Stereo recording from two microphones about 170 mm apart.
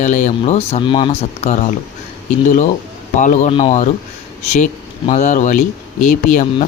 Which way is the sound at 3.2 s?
50° left (ahead or behind).